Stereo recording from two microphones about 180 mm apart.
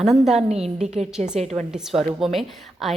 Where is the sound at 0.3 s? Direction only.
35° right (ahead or behind).